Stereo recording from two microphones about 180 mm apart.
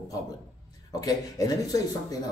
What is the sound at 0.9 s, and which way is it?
A man's voice, 20° left (ahead or behind).